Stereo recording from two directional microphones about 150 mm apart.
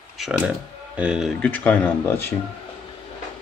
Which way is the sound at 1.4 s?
10° left (ahead or behind).